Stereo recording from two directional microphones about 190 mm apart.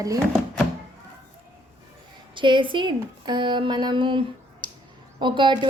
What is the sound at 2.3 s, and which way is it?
A woman's voice, 25° right (ahead or behind).